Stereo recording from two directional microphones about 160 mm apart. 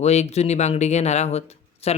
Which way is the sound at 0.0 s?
45° left (ahead or behind).